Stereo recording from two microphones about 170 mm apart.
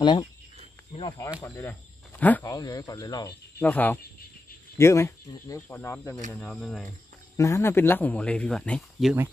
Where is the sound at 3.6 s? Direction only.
10° left (ahead or behind).